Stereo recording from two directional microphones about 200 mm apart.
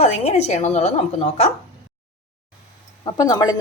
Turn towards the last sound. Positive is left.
turn(degrees=20)  # may be behind; listen again after turning